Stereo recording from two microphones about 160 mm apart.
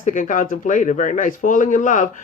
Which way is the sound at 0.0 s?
55° left (ahead or behind).